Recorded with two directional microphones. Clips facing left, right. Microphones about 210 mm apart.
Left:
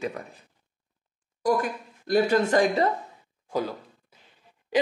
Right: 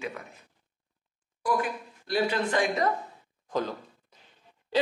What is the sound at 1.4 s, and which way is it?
A woman's voice, 45° left (ahead or behind).